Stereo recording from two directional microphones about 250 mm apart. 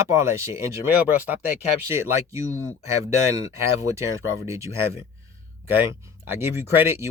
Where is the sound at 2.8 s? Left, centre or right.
Centre.